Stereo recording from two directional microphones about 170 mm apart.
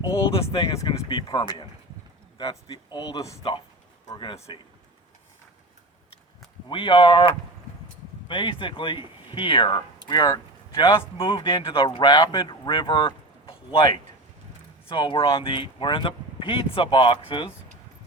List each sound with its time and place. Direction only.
0.7 s speech: 25° left (ahead or behind)
6.7 s speech: 30° left (ahead or behind)
8.3 s speech: 30° left (ahead or behind)